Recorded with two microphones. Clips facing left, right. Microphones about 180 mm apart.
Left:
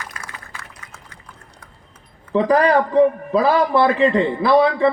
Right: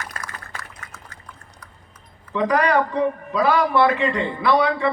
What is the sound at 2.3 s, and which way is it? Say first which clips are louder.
A man's voice: left 4 dB; 30° left (ahead or behind).